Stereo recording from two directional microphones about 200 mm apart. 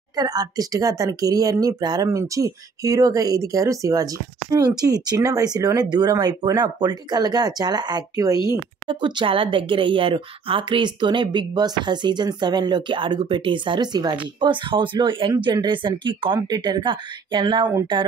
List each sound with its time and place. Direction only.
0.1 s a woman's voice: 20° right (ahead or behind)